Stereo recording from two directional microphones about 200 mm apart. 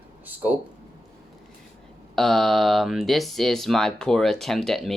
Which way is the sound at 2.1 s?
Centre (ahead or behind).